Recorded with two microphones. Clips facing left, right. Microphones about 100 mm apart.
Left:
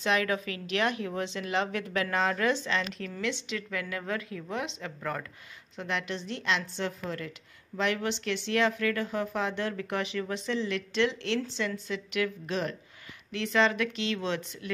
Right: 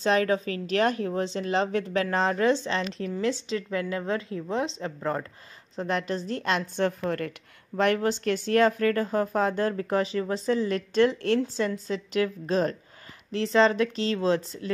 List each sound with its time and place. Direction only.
0.0 s a woman's voice: 35° right (ahead or behind)